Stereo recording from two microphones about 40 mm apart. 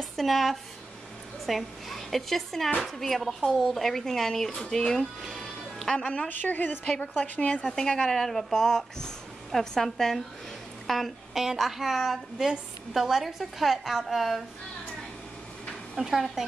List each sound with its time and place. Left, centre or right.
0.1 s a woman's voice: centre
6.2 s a woman's voice: left
6.8 s a woman's voice: left
7.7 s a woman's voice: centre
16.0 s a woman's voice: centre